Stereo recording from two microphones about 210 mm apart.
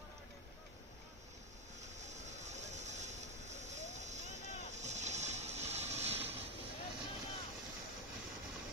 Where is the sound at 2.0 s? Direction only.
35° right (ahead or behind).